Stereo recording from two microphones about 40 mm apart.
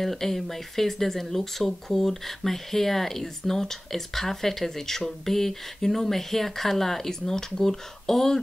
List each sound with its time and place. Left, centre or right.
0.0 s speech: centre